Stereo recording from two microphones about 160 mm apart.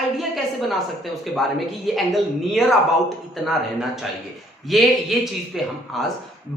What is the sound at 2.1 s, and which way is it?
Speech, centre (ahead or behind).